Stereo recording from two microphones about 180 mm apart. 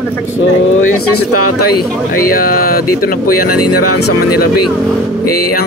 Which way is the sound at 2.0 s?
50° left (ahead or behind).